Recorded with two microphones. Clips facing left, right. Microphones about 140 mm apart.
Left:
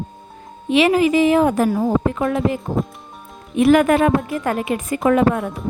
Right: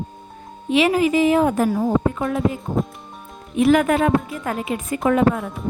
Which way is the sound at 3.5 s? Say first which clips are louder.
Left 3 dB; 65° left (ahead or behind).